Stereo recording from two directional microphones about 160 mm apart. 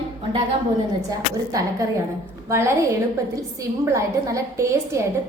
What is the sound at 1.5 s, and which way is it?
A woman's voice, 20° right (ahead or behind).